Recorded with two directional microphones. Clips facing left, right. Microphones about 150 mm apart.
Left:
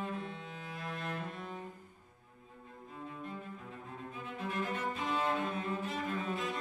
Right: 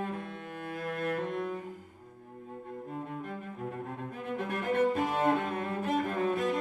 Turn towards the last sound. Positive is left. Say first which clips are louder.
# right 7 dB
turn(degrees=-60)  # may be behind; listen again after turning